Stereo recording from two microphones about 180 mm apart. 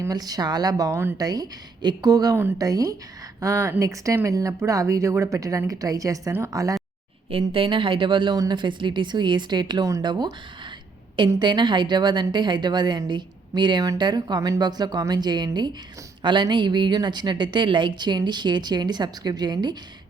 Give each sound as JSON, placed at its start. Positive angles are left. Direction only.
{"t": 0.0, "sound": "a woman's voice", "side_deg": -20}
{"t": 7.3, "sound": "a woman's voice", "side_deg": -30}